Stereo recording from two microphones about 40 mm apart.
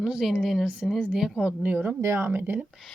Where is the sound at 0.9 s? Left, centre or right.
Centre.